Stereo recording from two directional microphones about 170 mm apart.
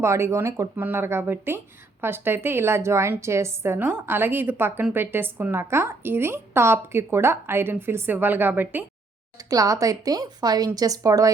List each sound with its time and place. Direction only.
0.0 s speech: 15° right (ahead or behind)